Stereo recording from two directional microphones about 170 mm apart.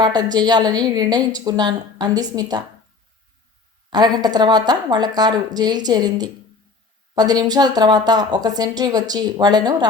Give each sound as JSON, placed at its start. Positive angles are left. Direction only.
{"t": 0.0, "sound": "a woman's voice", "side_deg": -25}
{"t": 3.8, "sound": "a woman's voice", "side_deg": -25}